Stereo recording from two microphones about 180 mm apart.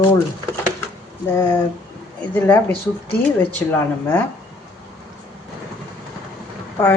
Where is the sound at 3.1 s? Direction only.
10° left (ahead or behind).